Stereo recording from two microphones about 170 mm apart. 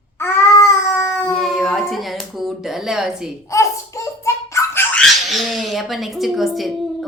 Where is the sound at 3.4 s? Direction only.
20° left (ahead or behind).